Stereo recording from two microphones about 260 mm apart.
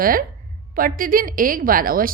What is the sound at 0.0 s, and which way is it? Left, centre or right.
A woman's voice, right.